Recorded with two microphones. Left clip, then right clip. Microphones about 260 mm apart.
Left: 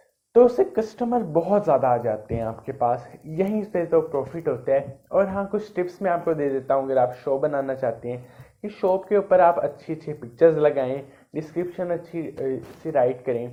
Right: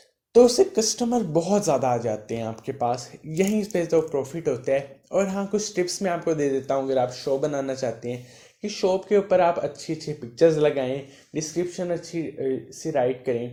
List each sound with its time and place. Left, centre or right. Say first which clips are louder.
0.5 s speech: right 2 dB; right